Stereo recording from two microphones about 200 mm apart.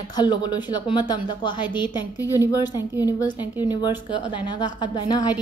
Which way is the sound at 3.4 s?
10° right (ahead or behind).